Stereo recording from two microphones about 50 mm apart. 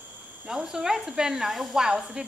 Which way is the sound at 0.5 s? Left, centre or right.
Centre.